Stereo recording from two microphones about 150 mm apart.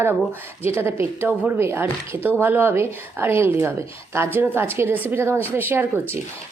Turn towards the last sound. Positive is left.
turn(degrees=-15)  # may be behind; listen again after turning